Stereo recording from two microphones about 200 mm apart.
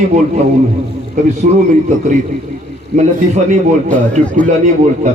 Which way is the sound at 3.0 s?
35° right (ahead or behind).